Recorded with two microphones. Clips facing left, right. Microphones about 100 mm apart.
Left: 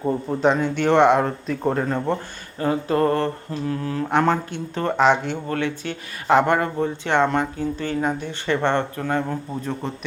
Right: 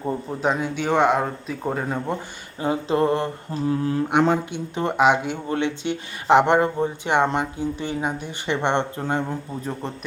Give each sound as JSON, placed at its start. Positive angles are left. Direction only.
{"t": 0.0, "sound": "speech", "side_deg": 0}
{"t": 5.5, "sound": "speech", "side_deg": -20}